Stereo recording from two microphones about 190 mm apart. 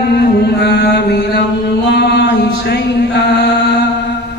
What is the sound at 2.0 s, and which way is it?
Music, 60° left (ahead or behind).